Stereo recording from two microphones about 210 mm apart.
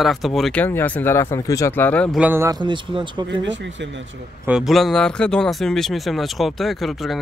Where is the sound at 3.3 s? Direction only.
60° right (ahead or behind).